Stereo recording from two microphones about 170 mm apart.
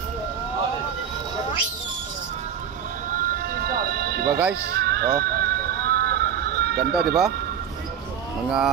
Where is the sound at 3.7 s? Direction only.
65° right (ahead or behind).